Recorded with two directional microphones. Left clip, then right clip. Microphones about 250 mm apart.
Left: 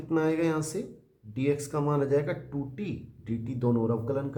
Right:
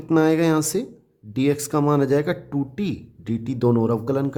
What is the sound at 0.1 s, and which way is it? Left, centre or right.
Speech, right.